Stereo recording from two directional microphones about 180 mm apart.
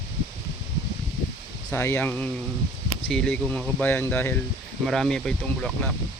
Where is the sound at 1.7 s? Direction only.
10° left (ahead or behind).